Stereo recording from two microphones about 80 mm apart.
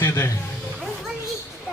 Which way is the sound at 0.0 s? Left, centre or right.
Left.